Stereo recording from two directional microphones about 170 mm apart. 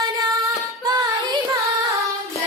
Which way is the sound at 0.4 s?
25° right (ahead or behind).